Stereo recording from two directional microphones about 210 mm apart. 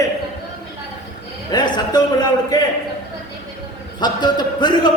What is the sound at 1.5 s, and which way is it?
A man's voice, 20° left (ahead or behind).